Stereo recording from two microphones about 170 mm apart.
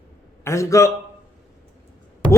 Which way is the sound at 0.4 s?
15° left (ahead or behind).